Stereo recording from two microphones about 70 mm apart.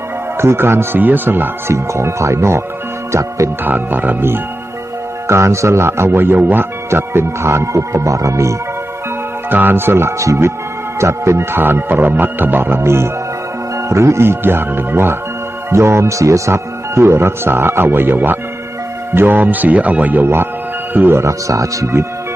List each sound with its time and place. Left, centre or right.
0.3 s speech: right
1.7 s speech: right
3.6 s speech: right
5.3 s speech: right
9.5 s speech: right
21.2 s speech: right